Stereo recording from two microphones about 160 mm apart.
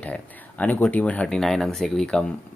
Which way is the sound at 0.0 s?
10° left (ahead or behind).